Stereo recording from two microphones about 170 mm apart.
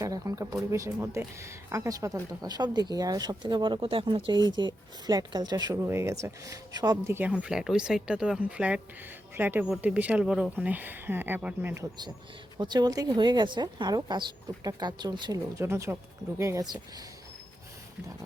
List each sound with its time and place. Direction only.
0.0 s speech: 20° right (ahead or behind)